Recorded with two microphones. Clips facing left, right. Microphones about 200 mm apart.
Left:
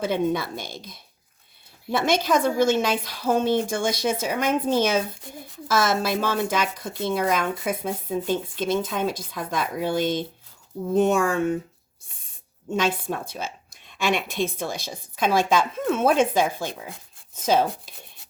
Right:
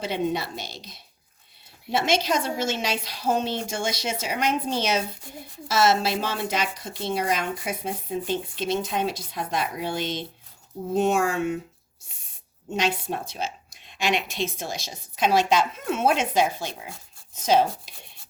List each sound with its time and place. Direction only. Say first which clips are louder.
0.0 s speech: left 3 dB; 50° left (ahead or behind)
12.0 s owl: left 1 dB; 50° left (ahead or behind)
12.7 s speech: left 2 dB; 50° left (ahead or behind)